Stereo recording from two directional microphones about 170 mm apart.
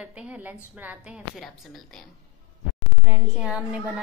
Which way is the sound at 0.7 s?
10° right (ahead or behind).